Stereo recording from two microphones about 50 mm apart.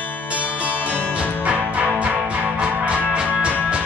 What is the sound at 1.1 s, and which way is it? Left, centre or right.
Music, right.